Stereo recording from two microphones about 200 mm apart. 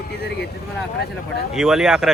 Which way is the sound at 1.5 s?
Centre (ahead or behind).